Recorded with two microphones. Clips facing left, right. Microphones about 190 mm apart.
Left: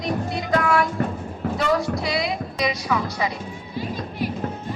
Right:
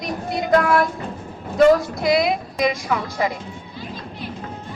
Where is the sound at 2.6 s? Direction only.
50° right (ahead or behind).